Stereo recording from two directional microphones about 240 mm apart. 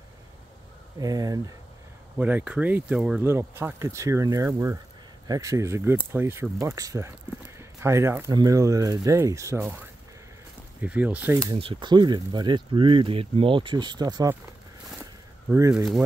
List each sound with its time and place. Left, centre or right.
0.9 s speech: centre
15.5 s speech: centre